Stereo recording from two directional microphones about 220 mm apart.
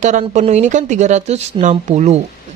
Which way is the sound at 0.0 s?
30° right (ahead or behind).